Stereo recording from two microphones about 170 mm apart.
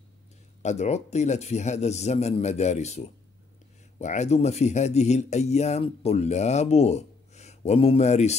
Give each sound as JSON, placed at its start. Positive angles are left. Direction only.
{"t": 0.6, "sound": "speech", "side_deg": 40}